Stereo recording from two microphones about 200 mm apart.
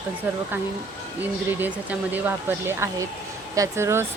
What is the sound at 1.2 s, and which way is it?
Speech, 10° right (ahead or behind).